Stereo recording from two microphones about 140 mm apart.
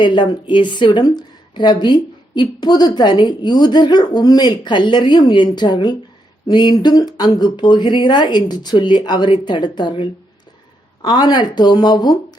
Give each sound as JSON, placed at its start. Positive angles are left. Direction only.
{"t": 0.0, "sound": "a woman's voice", "side_deg": 35}